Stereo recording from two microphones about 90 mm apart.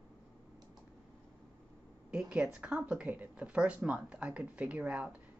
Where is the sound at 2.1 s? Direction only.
10° right (ahead or behind).